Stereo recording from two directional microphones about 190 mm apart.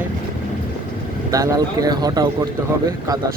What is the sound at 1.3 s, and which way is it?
Speech, 20° right (ahead or behind).